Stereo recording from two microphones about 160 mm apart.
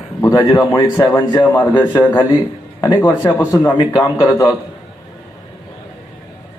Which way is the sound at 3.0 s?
15° left (ahead or behind).